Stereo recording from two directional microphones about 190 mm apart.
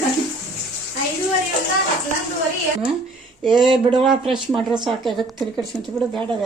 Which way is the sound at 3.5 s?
25° right (ahead or behind).